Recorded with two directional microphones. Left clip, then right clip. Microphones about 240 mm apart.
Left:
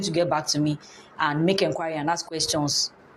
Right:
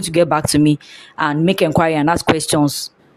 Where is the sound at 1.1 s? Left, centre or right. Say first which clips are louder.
Right 6 dB; right.